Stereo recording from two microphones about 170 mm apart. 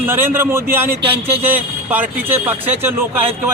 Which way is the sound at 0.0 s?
10° right (ahead or behind).